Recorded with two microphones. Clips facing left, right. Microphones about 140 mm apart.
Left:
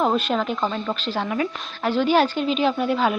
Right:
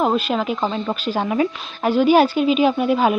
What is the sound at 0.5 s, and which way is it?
A woman's voice, 20° right (ahead or behind).